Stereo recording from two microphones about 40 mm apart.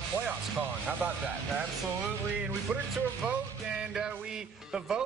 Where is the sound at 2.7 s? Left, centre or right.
Right.